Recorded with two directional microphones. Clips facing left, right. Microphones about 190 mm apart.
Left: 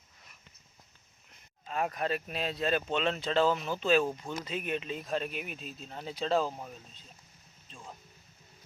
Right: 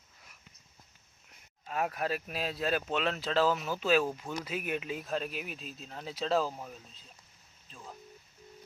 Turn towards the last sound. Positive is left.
turn(degrees=0)  # may be behind; listen again after turning